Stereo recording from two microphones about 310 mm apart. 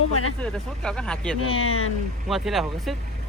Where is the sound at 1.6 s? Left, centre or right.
Left.